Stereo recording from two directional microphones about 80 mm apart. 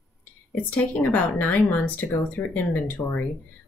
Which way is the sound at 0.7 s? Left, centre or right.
Left.